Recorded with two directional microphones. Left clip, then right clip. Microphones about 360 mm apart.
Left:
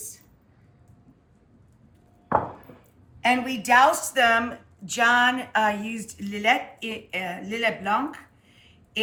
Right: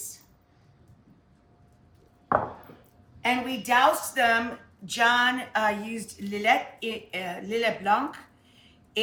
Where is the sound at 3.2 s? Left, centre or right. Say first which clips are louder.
Left 4 dB; centre.